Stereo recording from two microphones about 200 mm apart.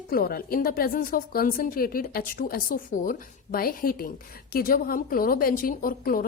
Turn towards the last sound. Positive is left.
turn(degrees=45)  # may be behind; listen again after turning